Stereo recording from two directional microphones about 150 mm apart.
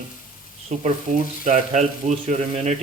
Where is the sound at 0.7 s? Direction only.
55° right (ahead or behind).